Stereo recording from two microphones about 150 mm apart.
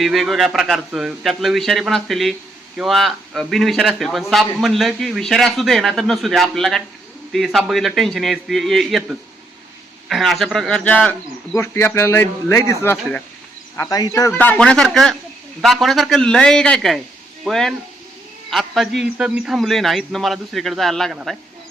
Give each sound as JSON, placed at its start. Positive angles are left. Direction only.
{"t": 0.0, "sound": "a man's voice", "side_deg": 0}